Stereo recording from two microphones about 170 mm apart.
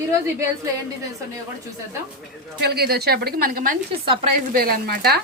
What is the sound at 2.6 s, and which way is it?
Speech, 70° right (ahead or behind).